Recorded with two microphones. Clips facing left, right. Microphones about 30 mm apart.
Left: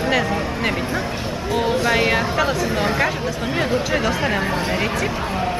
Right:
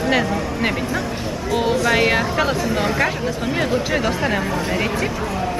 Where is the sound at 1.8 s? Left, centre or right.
Centre.